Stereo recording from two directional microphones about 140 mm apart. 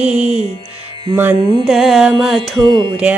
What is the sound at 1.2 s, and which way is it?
Mantra, 15° right (ahead or behind).